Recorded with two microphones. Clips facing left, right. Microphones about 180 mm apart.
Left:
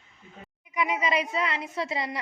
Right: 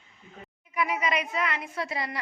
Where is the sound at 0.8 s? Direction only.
20° left (ahead or behind).